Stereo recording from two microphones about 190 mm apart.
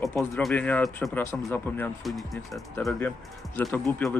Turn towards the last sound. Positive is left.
turn(degrees=10)  # may be behind; listen again after turning